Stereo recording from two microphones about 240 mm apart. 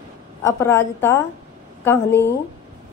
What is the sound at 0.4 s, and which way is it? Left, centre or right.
Speech, centre.